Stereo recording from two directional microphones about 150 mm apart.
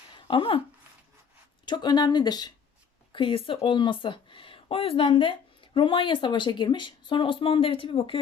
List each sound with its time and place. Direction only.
0.3 s speech: 35° left (ahead or behind)
1.6 s speech: 30° left (ahead or behind)